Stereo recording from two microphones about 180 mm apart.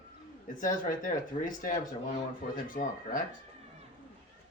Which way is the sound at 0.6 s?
45° left (ahead or behind).